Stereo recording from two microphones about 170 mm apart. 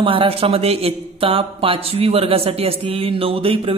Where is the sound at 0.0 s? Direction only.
30° right (ahead or behind).